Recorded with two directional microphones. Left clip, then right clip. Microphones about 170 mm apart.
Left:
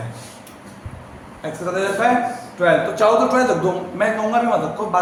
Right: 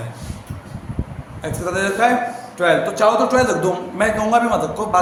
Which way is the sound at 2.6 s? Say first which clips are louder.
Even; 50° right (ahead or behind).